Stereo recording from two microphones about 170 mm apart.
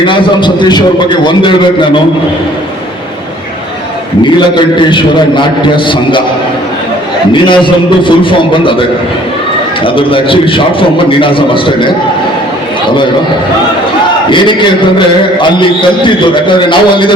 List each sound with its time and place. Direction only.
0.0 s a man's voice: 30° left (ahead or behind)
4.4 s a man's voice: 25° left (ahead or behind)
7.4 s a man's voice: 30° left (ahead or behind)
9.8 s a man's voice: 30° left (ahead or behind)
14.3 s a sound: 30° left (ahead or behind)
16.0 s a man's voice: 30° left (ahead or behind)